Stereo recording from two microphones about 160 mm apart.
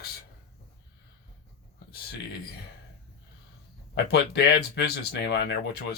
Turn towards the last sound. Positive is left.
turn(degrees=90)